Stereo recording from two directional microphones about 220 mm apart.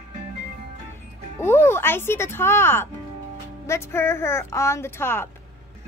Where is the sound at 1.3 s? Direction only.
10° left (ahead or behind).